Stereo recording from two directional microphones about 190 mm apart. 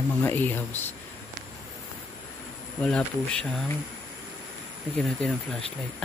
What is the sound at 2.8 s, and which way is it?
Speech, 5° left (ahead or behind).